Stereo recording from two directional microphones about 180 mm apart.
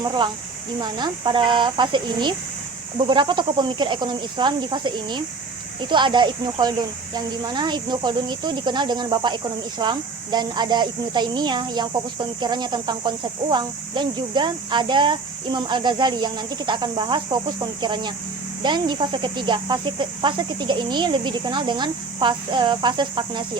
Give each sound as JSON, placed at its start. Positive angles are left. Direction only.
{"t": 0.0, "sound": "speech", "side_deg": -25}